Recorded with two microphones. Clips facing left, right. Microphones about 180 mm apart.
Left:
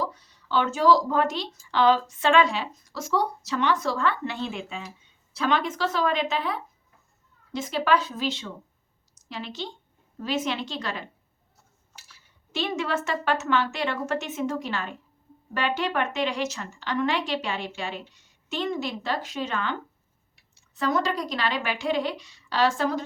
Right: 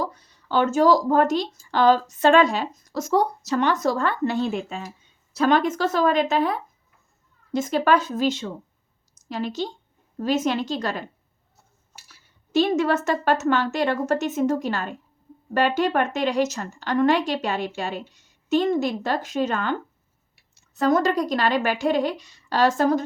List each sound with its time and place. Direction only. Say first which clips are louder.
0.0 s a woman's voice: right 2 dB; 45° right (ahead or behind)
12.0 s a woman's voice: right 1 dB; 40° right (ahead or behind)